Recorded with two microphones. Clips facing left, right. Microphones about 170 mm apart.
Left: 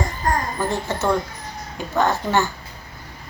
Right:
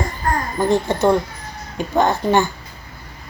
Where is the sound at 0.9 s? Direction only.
15° right (ahead or behind).